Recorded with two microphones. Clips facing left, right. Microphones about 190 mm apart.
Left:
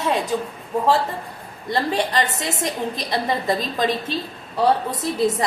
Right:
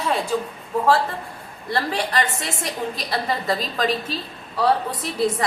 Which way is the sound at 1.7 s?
20° left (ahead or behind).